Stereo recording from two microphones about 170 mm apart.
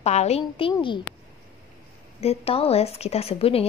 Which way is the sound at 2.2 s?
35° left (ahead or behind).